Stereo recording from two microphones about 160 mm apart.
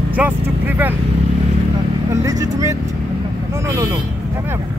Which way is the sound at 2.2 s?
20° right (ahead or behind).